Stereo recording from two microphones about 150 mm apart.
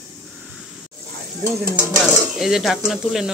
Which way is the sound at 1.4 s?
20° right (ahead or behind).